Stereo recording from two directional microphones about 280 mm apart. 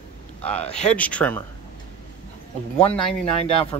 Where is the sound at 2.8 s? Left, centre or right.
Left.